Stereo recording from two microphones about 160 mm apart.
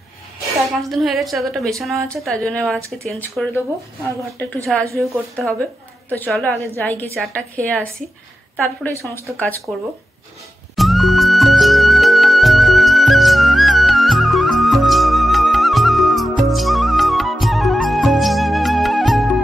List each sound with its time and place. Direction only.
0.7 s a woman's voice: centre (ahead or behind)
4.4 s a woman's voice: 15° left (ahead or behind)
4.9 s a woman's voice: centre (ahead or behind)
10.8 s music: centre (ahead or behind)